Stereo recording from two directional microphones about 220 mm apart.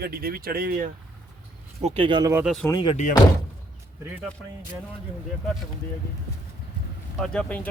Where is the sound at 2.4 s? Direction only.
Centre (ahead or behind).